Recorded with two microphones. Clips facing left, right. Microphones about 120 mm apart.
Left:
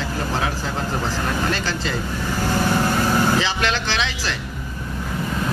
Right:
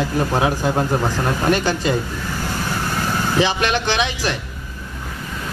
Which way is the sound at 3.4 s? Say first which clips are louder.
Right 4 dB; 15° right (ahead or behind).